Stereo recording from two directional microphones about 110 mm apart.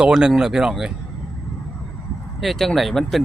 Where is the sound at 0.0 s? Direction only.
5° right (ahead or behind).